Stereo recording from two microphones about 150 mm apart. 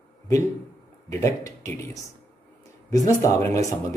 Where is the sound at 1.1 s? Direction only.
20° left (ahead or behind).